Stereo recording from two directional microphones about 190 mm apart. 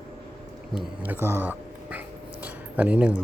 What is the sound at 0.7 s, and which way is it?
Speech, 10° right (ahead or behind).